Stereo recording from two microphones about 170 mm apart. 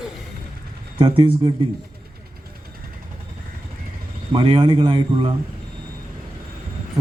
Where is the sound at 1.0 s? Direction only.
30° right (ahead or behind).